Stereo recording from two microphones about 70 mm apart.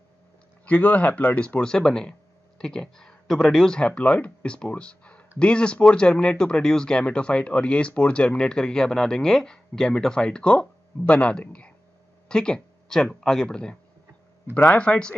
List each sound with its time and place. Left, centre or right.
0.7 s speech: centre